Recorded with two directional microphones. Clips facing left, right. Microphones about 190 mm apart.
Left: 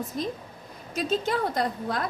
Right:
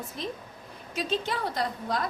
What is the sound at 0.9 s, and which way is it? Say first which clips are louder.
A woman's voice: left 4 dB; 45° left (ahead or behind).